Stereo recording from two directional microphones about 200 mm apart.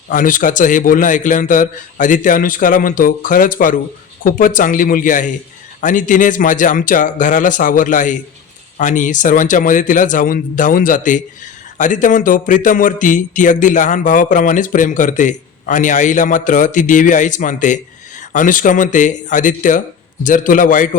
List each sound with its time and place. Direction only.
0.1 s a man's voice: 40° left (ahead or behind)